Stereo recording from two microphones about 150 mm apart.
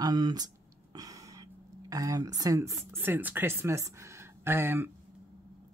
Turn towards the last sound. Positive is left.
turn(degrees=-15)  # may be behind; listen again after turning